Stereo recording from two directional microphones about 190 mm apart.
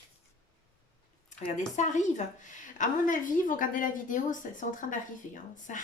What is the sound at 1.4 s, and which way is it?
A woman's voice, 40° left (ahead or behind).